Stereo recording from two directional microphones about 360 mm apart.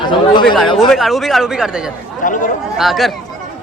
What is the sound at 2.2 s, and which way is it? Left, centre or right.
Speech, left.